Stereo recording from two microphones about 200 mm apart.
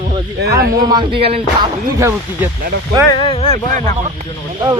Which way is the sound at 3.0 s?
25° left (ahead or behind).